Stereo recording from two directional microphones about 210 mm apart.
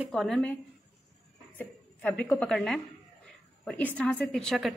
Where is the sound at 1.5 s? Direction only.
5° left (ahead or behind).